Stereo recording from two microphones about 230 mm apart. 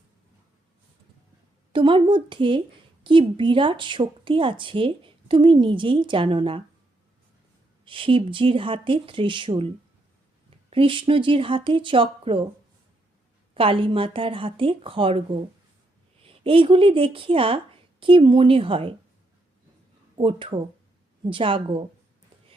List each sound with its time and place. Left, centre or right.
1.7 s a woman's voice: right
7.9 s a woman's voice: right
13.5 s a woman's voice: right
20.1 s a woman's voice: right